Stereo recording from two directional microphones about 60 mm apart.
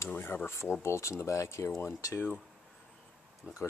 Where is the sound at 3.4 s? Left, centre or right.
Right.